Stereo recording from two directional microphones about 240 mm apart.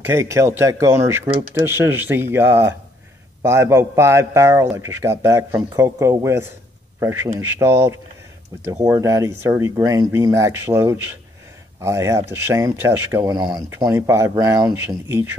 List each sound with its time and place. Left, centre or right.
0.0 s speech: centre